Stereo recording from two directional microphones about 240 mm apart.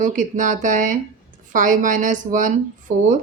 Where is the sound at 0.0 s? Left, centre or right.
Right.